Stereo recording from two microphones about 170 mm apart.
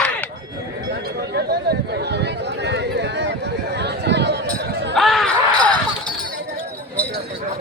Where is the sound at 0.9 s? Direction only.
85° right.